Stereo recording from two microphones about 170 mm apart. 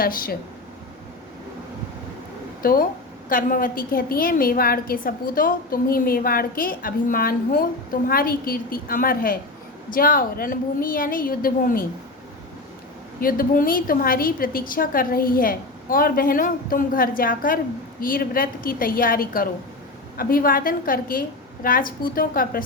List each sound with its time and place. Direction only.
0.0 s a woman's voice: 60° left (ahead or behind)
2.6 s a woman's voice: 60° left (ahead or behind)
13.1 s a woman's voice: 55° left (ahead or behind)